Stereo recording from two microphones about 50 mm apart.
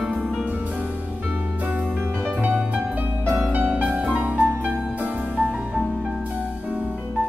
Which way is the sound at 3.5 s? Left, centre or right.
Right.